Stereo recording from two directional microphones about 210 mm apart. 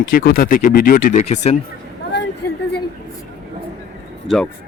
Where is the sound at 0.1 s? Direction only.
45° left (ahead or behind).